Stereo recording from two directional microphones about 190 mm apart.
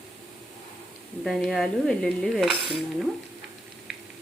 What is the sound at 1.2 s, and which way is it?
Dishes, centre (ahead or behind).